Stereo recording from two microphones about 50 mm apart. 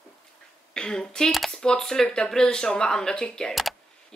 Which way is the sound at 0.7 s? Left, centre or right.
Centre.